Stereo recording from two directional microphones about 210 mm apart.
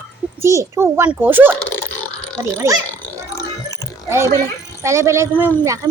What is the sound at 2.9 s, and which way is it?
Burping, 10° left (ahead or behind).